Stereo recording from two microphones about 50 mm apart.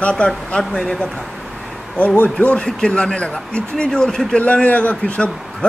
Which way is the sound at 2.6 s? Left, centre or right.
Centre.